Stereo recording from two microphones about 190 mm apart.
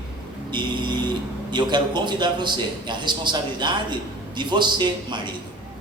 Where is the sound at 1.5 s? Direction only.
25° right (ahead or behind).